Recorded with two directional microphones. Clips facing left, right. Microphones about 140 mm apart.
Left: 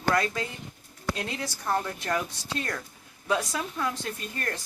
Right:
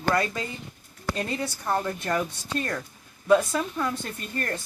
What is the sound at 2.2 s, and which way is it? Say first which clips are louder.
Speech: right 3 dB; 90° left.